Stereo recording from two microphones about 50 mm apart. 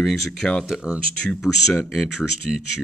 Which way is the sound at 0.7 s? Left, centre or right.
Centre.